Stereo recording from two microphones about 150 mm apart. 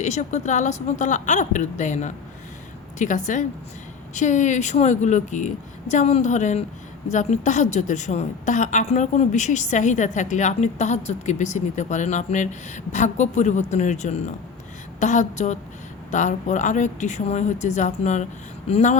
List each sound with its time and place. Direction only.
0.0 s a woman's voice: 50° left (ahead or behind)